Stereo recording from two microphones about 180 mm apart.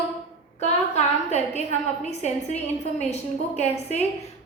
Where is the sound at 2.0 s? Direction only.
40° left (ahead or behind).